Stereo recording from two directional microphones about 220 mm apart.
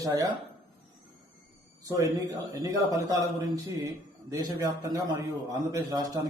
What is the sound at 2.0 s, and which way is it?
A man's voice, 15° right (ahead or behind).